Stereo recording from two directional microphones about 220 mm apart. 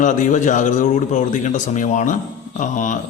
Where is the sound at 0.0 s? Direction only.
35° left (ahead or behind).